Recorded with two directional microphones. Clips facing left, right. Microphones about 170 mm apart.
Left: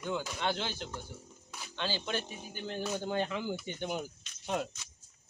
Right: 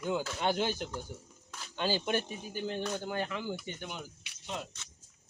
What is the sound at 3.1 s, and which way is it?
Speech, 20° left (ahead or behind).